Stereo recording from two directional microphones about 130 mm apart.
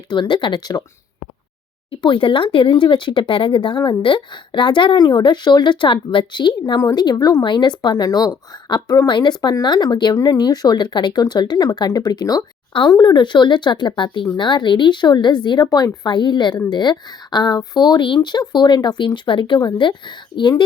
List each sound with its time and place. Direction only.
0.1 s speech: 35° left (ahead or behind)
1.9 s speech: 40° left (ahead or behind)